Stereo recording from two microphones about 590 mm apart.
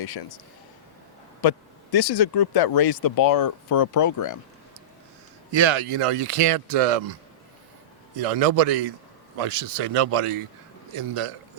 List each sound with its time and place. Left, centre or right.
0.0 s speech: left
1.4 s speech: left
5.5 s a man's voice: right